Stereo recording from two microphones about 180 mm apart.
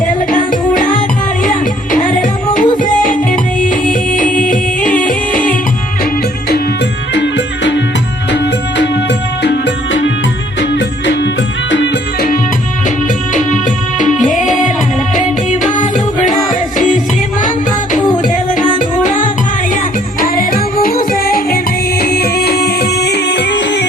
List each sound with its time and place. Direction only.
0.3 s music: 50° left (ahead or behind)
7.1 s music: 75° left (ahead or behind)
8.8 s music: 70° left (ahead or behind)
14.0 s music: 45° left (ahead or behind)
18.2 s music: 45° left (ahead or behind)
20.2 s music: 50° left (ahead or behind); by 23.8 s 70° left (ahead or behind)